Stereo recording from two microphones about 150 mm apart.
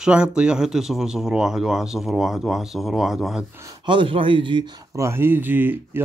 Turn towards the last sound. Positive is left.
turn(degrees=-10)  # may be behind; listen again after turning